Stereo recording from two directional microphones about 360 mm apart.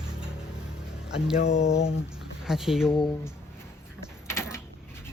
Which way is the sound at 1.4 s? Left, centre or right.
Centre.